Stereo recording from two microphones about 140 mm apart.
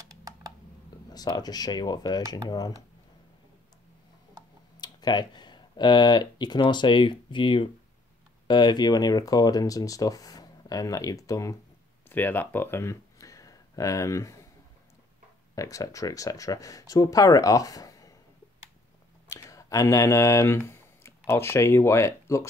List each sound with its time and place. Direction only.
0.1 s computer keyboard: 25° right (ahead or behind)
0.8 s speech: 30° left (ahead or behind)
4.7 s speech: 30° left (ahead or behind)
12.1 s speech: 15° left (ahead or behind)
15.5 s speech: 25° left (ahead or behind)
19.2 s speech: 25° left (ahead or behind)